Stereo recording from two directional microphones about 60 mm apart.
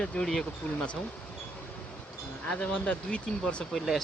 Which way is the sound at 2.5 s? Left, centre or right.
Centre.